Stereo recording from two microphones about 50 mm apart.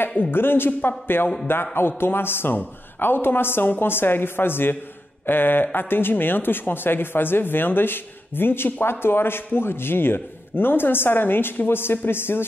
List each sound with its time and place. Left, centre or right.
0.2 s speech: left